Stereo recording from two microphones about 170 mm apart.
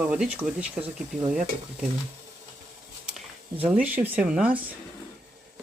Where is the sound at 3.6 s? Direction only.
10° right (ahead or behind).